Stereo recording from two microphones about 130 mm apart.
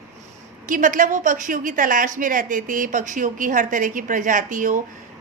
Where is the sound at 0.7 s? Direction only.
90° right.